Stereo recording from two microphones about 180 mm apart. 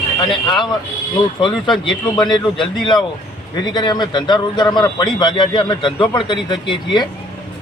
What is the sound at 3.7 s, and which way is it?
A man's voice, 25° left (ahead or behind).